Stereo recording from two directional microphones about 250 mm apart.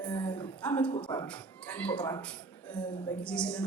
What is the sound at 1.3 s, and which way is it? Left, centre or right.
Speech, centre.